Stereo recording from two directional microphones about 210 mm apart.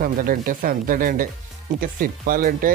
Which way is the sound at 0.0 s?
40° right (ahead or behind).